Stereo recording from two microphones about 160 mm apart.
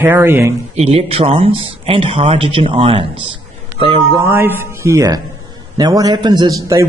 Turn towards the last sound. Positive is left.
turn(degrees=-20)  # may be behind; listen again after turning